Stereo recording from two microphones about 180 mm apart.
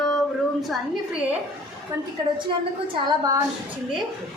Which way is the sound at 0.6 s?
5° right (ahead or behind).